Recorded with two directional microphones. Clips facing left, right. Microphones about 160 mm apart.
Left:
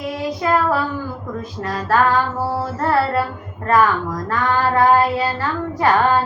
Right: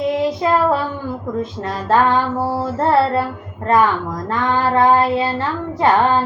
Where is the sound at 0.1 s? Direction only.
25° right (ahead or behind).